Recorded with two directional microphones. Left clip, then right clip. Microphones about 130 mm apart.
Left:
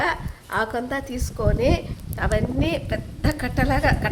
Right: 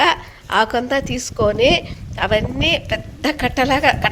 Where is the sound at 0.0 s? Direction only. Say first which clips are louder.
Right 8 dB; 35° right (ahead or behind).